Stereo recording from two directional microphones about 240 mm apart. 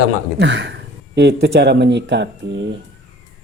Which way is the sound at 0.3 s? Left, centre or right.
Right.